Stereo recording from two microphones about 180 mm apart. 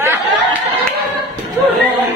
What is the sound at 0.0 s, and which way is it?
Chatter, 15° right (ahead or behind).